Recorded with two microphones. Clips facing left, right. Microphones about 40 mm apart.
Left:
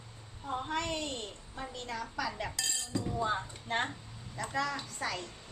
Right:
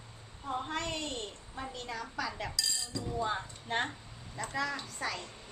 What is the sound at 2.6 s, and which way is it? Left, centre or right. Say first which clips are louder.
Chink: right 1 dB; left.